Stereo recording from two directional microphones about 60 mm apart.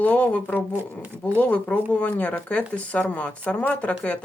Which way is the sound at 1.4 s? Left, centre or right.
Left.